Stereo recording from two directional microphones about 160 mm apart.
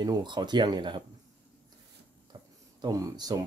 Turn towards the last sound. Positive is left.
turn(degrees=-25)  # may be behind; listen again after turning